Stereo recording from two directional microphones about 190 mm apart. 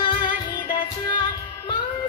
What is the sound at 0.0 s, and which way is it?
Music, 25° left (ahead or behind).